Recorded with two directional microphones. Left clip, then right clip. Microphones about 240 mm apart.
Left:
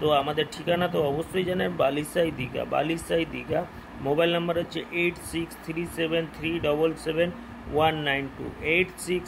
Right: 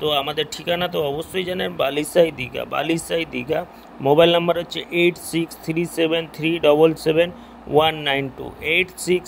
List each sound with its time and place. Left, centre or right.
0.0 s speech: right